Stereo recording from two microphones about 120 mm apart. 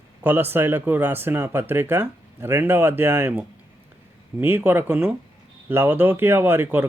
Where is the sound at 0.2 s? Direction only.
15° right (ahead or behind).